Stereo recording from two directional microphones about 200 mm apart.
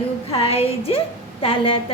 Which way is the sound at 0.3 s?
30° left (ahead or behind).